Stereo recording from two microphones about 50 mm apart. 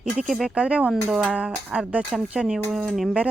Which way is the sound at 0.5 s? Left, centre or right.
Right.